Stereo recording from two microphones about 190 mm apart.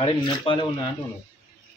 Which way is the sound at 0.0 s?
25° left (ahead or behind).